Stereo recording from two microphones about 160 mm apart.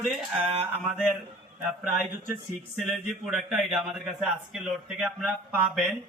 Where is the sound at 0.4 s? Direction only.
35° right (ahead or behind).